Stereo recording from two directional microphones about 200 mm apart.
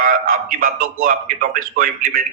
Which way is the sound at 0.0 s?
45° right (ahead or behind).